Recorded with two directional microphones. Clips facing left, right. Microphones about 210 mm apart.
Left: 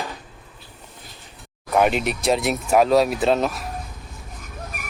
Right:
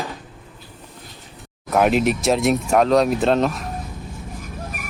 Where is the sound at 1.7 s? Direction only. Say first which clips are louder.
Right 2 dB; centre (ahead or behind).